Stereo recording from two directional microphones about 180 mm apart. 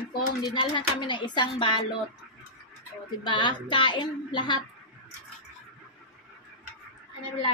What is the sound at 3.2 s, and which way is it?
A woman's voice, 25° left (ahead or behind).